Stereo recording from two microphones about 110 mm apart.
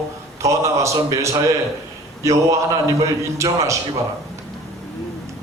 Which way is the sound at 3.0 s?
30° right (ahead or behind).